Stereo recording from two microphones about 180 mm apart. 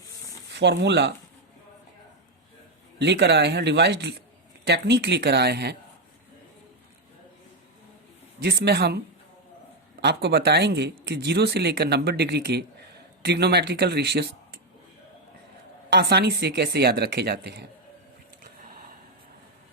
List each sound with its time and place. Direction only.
0.5 s speech: 75° right (ahead or behind)
3.0 s speech: 70° right (ahead or behind)
8.4 s speech: 65° right (ahead or behind)
10.0 s speech: 65° right (ahead or behind)
15.9 s speech: 65° right (ahead or behind)